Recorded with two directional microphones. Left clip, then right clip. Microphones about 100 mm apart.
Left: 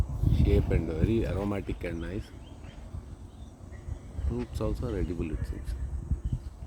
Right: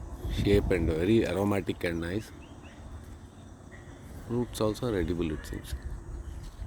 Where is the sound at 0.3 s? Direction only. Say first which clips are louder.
Right 4 dB; 35° right (ahead or behind).